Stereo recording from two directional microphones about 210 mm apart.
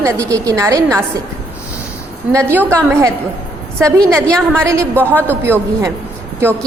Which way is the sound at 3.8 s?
15° right (ahead or behind).